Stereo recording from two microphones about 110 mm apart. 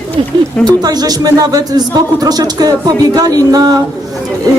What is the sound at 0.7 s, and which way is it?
Speech, 40° right (ahead or behind).